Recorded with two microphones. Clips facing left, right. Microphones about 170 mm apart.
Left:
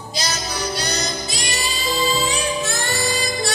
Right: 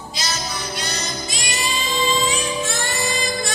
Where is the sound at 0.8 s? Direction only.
35° left (ahead or behind).